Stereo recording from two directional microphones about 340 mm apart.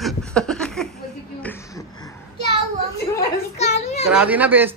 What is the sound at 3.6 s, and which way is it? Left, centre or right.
Children playing, centre.